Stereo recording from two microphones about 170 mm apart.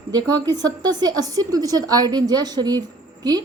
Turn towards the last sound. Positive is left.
turn(degrees=-25)  # may be behind; listen again after turning